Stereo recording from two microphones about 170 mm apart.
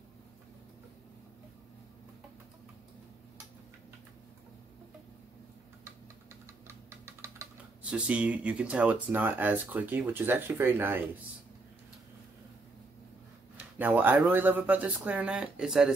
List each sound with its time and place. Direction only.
6.4 s typing: 15° right (ahead or behind)
7.9 s speech: 5° right (ahead or behind)
13.7 s speech: 10° right (ahead or behind)